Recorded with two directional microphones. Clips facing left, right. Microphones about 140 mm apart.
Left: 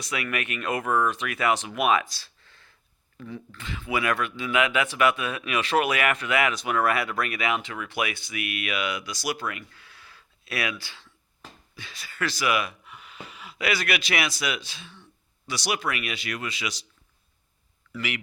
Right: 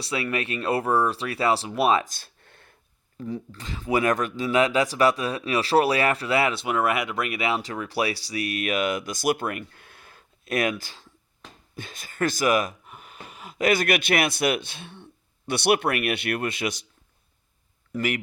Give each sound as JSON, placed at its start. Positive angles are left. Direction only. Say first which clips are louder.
{"t": 0.0, "sound": "speech", "louder": "right 3 dB", "side_deg": -30}
{"t": 2.0, "sound": "a sound", "louder": "right 1 dB", "side_deg": -50}
{"t": 3.2, "sound": "speech", "louder": "right 6 dB", "side_deg": -35}
{"t": 17.9, "sound": "speech", "louder": "right 6 dB", "side_deg": -45}